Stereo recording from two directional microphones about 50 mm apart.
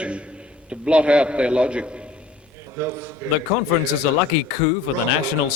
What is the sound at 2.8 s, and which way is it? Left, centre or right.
Speech, right.